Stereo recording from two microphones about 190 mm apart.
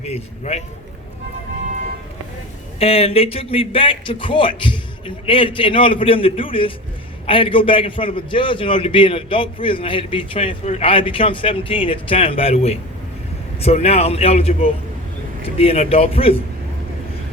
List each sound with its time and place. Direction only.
0.0 s a man's voice: 35° left (ahead or behind)
2.7 s a man's voice: 30° left (ahead or behind)